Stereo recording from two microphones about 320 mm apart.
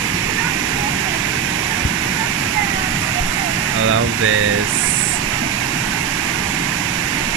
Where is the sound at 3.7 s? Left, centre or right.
Right.